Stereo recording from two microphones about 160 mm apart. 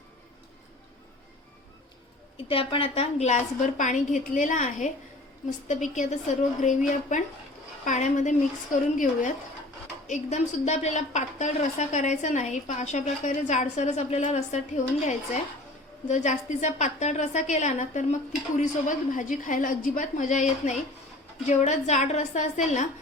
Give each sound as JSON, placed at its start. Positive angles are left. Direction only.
{"t": 2.5, "sound": "a woman's voice", "side_deg": 35}